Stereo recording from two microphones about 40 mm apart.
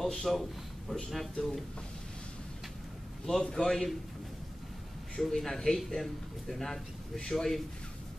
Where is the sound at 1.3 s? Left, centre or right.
Centre.